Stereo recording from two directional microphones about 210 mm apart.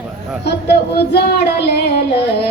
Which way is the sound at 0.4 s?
50° left (ahead or behind).